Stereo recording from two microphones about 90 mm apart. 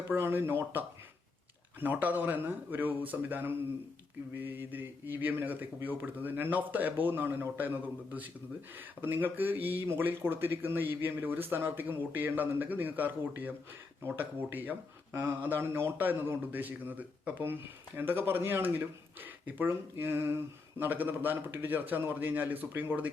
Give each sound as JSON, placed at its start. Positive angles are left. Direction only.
{"t": 0.1, "sound": "a man's voice", "side_deg": -25}
{"t": 1.8, "sound": "a man's voice", "side_deg": -20}